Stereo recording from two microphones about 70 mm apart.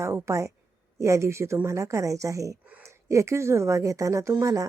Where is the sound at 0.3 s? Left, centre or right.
Right.